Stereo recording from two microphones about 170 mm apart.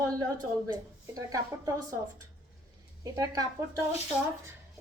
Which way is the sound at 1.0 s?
20° right (ahead or behind).